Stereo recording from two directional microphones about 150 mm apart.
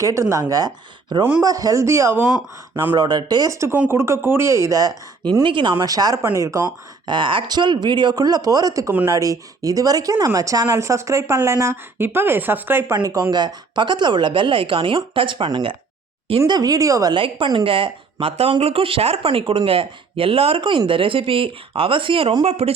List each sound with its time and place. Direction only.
0.0 s speech: 20° right (ahead or behind); by 22.7 s 45° right (ahead or behind)